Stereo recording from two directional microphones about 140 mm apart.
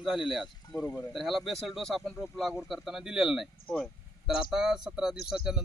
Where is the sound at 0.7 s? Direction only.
25° left (ahead or behind).